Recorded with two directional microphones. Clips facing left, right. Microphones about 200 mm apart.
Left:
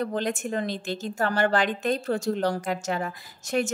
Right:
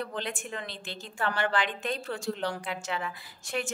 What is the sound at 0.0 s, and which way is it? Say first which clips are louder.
Speech: left 8 dB; 45° left (ahead or behind).